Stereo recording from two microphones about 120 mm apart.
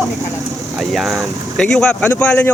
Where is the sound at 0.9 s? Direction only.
Centre (ahead or behind).